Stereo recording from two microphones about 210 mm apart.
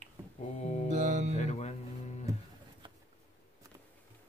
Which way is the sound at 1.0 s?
35° right (ahead or behind).